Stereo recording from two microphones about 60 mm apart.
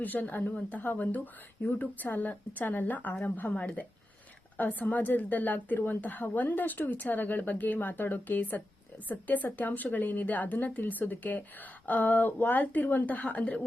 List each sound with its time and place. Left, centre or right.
0.0 s speech: left